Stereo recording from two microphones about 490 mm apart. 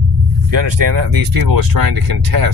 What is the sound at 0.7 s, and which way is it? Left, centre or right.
Speech, right.